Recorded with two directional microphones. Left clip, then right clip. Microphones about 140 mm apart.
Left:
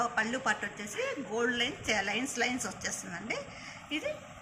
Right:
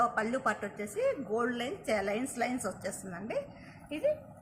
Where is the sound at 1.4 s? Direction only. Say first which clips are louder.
Left 2 dB; 90° right.